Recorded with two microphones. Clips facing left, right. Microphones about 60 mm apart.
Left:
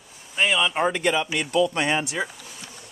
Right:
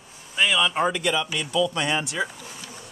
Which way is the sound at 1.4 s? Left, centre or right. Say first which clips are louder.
Left 2 dB; left.